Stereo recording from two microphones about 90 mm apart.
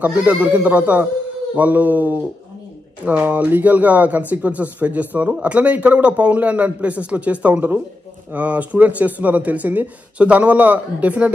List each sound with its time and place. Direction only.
0.0 s speech: 15° right (ahead or behind)